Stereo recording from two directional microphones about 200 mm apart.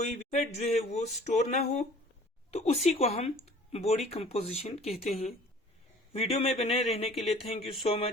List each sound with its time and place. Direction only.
0.3 s speech: 35° left (ahead or behind)